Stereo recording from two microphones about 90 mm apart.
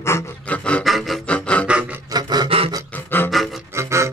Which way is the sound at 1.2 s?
15° left (ahead or behind).